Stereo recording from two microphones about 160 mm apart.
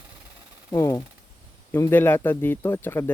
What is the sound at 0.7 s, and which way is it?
Speech, 15° left (ahead or behind).